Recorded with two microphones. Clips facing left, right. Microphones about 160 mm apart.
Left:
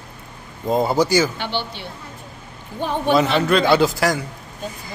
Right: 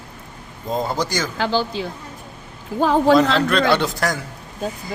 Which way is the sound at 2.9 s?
90° right.